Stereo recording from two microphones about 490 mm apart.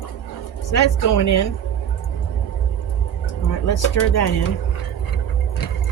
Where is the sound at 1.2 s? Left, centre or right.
Left.